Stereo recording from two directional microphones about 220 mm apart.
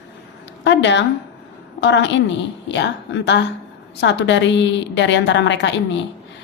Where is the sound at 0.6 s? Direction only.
55° left (ahead or behind).